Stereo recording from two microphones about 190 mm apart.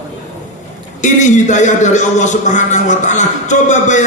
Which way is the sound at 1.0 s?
40° left (ahead or behind).